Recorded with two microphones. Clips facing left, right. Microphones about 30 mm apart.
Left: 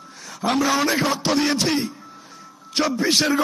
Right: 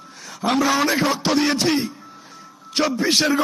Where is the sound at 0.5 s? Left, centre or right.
Centre.